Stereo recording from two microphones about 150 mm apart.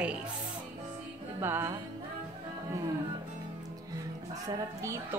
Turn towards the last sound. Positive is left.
turn(degrees=-20)  # may be behind; listen again after turning